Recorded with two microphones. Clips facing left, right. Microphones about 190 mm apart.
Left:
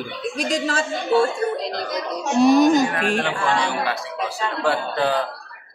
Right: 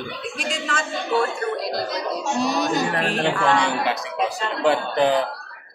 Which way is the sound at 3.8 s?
20° right (ahead or behind).